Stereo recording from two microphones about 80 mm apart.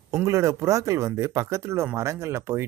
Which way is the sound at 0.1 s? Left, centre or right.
Right.